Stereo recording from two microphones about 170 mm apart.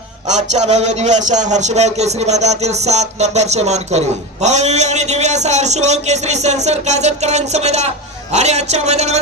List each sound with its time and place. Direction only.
0.3 s a man's voice: 40° right (ahead or behind)